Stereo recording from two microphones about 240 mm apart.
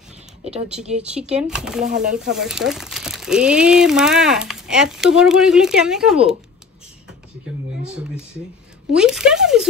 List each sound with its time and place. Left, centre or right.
0.8 s speech: right
1.2 s speech: centre
8.9 s speech: centre